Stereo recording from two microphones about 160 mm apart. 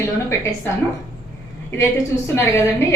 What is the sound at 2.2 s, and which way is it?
Speech, 15° left (ahead or behind).